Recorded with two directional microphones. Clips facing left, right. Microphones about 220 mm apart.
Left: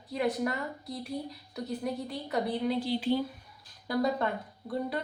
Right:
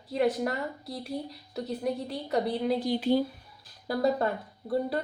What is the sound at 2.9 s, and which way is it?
Speech, 50° right (ahead or behind).